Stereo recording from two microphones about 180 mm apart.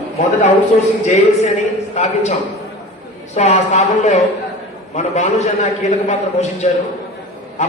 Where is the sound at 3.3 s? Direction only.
40° left (ahead or behind).